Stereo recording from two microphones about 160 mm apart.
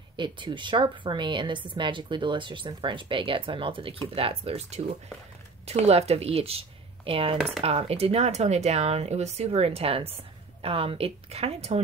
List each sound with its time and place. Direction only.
0.1 s a woman's voice: 30° right (ahead or behind)
7.3 s speech: centre (ahead or behind)
7.6 s speech: 40° right (ahead or behind)